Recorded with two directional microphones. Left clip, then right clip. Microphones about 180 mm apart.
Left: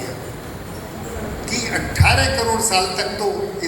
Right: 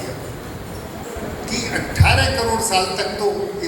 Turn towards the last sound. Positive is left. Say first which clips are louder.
# even
turn(degrees=25)  # may be behind; listen again after turning